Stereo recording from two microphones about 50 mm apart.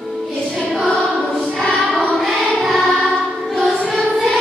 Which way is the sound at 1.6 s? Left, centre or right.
Centre.